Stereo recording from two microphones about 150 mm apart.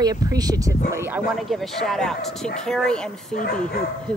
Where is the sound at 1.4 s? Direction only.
Centre (ahead or behind).